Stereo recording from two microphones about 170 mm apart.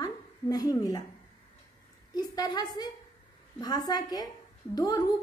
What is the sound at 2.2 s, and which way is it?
A woman's voice, 25° left (ahead or behind).